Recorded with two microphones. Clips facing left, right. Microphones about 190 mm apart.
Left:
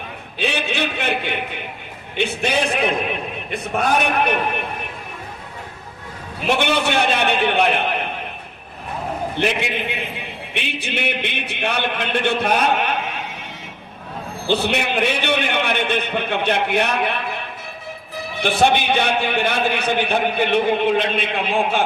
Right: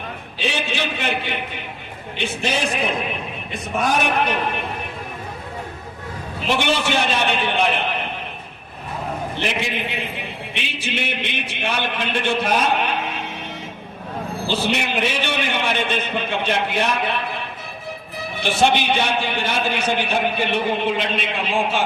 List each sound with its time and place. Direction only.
0.3 s a sound: 60° left (ahead or behind)
2.1 s a man's voice: 60° left (ahead or behind)
6.5 s a man's voice: 55° left (ahead or behind)
9.4 s a man's voice: 55° left (ahead or behind)
14.4 s a man's voice: 60° left (ahead or behind)
18.4 s a man's voice: 55° left (ahead or behind)